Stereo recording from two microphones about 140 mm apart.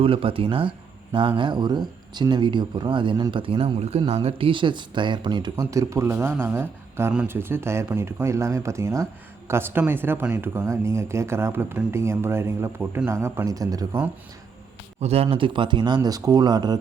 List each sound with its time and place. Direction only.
0.0 s speech: 40° right (ahead or behind)
15.0 s speech: 45° right (ahead or behind); by 16.7 s 30° right (ahead or behind)